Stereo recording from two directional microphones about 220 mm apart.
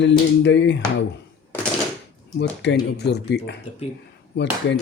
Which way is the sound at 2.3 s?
50° left (ahead or behind).